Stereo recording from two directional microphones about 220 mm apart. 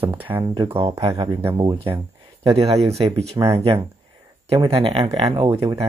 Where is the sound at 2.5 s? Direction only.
30° right (ahead or behind).